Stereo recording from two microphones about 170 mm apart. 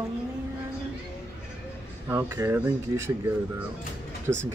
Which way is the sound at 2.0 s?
15° right (ahead or behind).